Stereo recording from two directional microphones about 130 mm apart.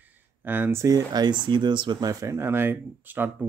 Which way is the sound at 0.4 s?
15° right (ahead or behind).